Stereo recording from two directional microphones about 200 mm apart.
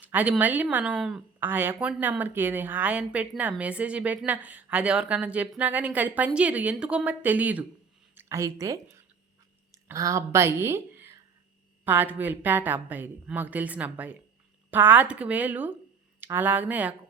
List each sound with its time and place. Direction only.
0.0 s speech: 10° right (ahead or behind)